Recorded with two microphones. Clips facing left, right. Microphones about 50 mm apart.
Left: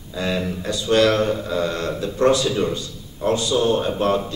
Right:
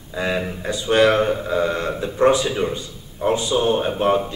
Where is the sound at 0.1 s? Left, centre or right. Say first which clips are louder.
Right 1 dB; right.